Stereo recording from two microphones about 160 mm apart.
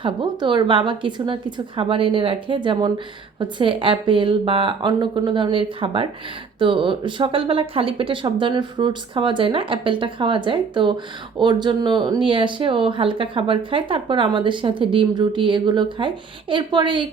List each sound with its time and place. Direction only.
0.0 s speech: 30° right (ahead or behind)